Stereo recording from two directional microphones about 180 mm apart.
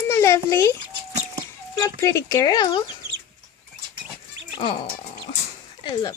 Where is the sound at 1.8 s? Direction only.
15° left (ahead or behind).